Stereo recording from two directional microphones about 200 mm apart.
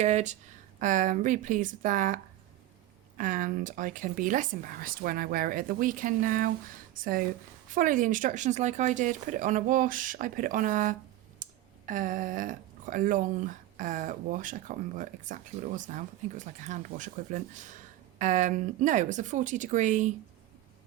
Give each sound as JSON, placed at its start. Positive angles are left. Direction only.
{"t": 0.0, "sound": "speech", "side_deg": -35}
{"t": 11.4, "sound": "a sound", "side_deg": -40}
{"t": 11.9, "sound": "speech", "side_deg": -40}